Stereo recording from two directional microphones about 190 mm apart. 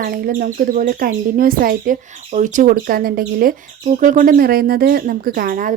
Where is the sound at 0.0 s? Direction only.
50° right (ahead or behind).